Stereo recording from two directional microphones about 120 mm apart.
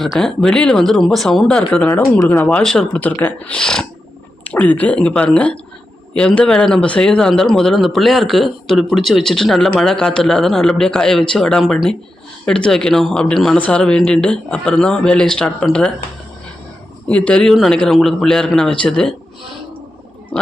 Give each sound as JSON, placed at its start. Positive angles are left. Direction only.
{"t": 0.0, "sound": "speech", "side_deg": 0}
{"t": 1.9, "sound": "a man's voice", "side_deg": 20}
{"t": 17.1, "sound": "speech", "side_deg": 10}